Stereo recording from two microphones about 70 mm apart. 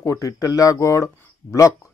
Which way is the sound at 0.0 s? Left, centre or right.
Left.